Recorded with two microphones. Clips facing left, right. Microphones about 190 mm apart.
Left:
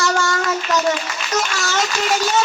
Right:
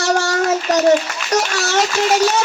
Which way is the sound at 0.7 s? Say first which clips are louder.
Right 7 dB; 65° right (ahead or behind).